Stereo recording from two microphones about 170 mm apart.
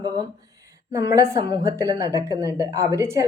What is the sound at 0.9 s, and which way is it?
A woman's voice, 15° right (ahead or behind).